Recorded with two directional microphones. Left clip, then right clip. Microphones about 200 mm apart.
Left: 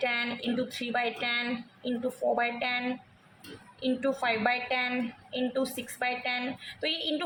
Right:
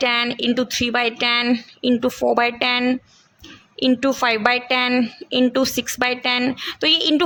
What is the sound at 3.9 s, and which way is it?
A woman's voice, 55° right (ahead or behind).